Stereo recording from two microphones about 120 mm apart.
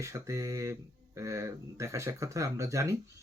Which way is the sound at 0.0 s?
25° right (ahead or behind).